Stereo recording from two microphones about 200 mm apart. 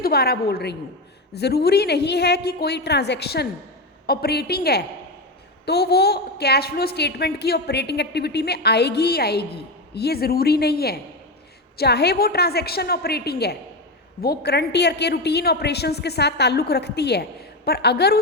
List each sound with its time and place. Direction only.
0.0 s a woman's voice: 50° left (ahead or behind)